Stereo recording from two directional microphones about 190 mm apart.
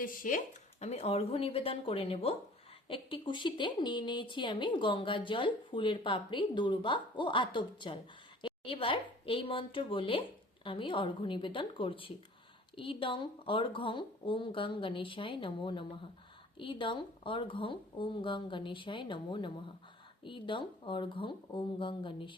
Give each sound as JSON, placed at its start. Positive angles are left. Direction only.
{"t": 0.0, "sound": "a woman's voice", "side_deg": 45}